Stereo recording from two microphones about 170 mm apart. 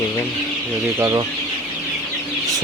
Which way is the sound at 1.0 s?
15° right (ahead or behind).